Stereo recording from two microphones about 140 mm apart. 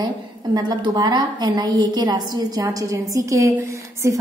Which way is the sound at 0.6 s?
30° right (ahead or behind).